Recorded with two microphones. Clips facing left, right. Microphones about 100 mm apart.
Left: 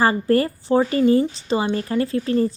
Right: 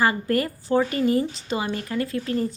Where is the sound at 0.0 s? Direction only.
30° left (ahead or behind).